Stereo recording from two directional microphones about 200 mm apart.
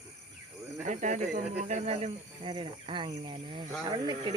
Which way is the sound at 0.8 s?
35° right (ahead or behind).